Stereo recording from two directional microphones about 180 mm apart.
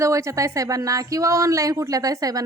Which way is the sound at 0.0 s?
15° right (ahead or behind).